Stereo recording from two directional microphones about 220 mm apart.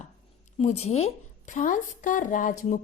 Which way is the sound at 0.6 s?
30° left (ahead or behind).